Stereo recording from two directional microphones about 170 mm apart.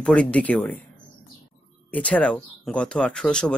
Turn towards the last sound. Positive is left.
turn(degrees=5)  # may be behind; listen again after turning